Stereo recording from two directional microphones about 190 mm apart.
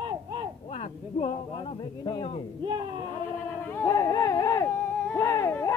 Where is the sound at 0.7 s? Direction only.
35° left (ahead or behind).